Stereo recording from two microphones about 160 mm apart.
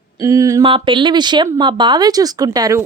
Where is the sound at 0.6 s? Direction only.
30° right (ahead or behind).